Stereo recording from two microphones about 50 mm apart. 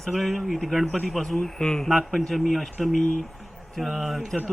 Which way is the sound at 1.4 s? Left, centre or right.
Centre.